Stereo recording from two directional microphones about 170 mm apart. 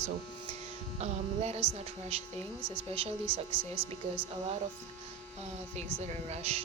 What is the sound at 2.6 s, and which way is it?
Speech, 10° right (ahead or behind).